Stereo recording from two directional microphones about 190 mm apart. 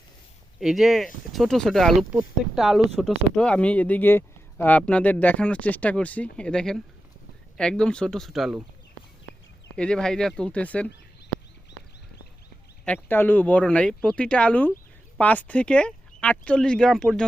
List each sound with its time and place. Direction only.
0.6 s speech: centre (ahead or behind)
9.7 s speech: 5° left (ahead or behind)
12.8 s speech: 10° left (ahead or behind)